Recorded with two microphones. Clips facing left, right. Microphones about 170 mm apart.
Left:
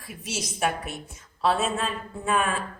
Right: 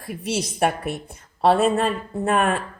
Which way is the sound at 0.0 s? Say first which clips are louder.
Right 8 dB; 60° right (ahead or behind).